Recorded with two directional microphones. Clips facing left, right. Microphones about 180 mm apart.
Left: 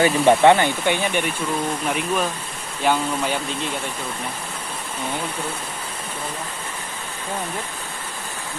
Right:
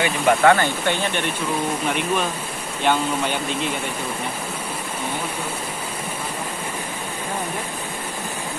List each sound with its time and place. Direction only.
0.0 s speech: 25° left (ahead or behind); by 1.3 s 10° left (ahead or behind)
1.9 s speech: centre (ahead or behind)